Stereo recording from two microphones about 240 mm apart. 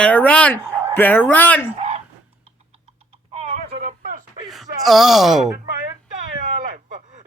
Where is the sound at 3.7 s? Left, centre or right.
Right.